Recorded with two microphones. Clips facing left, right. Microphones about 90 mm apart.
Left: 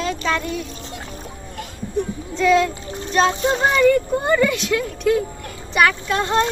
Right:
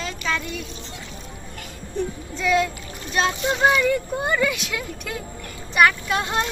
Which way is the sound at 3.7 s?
10° right (ahead or behind).